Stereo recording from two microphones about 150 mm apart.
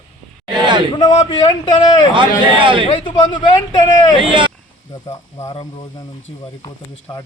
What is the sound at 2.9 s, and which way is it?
Speech, 30° left (ahead or behind).